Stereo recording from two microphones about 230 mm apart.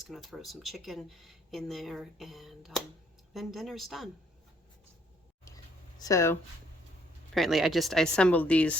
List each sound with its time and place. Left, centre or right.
0.0 s speech: centre
6.0 s speech: centre
7.3 s speech: centre